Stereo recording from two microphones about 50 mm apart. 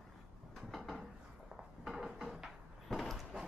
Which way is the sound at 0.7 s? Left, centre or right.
Centre.